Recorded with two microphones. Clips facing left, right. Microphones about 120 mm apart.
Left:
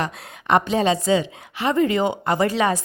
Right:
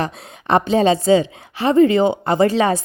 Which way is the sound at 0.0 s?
30° right (ahead or behind).